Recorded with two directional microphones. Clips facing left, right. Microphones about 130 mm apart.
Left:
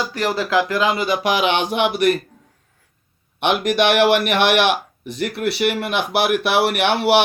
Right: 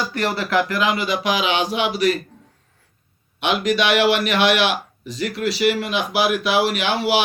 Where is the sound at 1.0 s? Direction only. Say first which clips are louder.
Left 2 dB; 50° left (ahead or behind).